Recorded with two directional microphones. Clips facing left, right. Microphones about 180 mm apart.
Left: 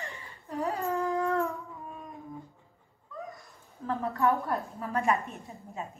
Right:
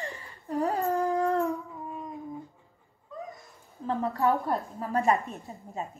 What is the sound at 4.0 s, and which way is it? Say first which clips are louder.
A woman's voice: right 1 dB; 35° right (ahead or behind).